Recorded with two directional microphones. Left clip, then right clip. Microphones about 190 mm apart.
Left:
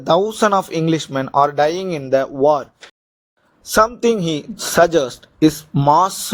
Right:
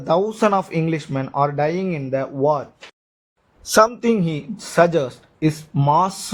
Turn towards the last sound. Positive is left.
turn(degrees=30)  # may be behind; listen again after turning